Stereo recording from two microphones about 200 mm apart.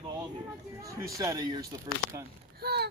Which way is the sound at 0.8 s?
15° right (ahead or behind).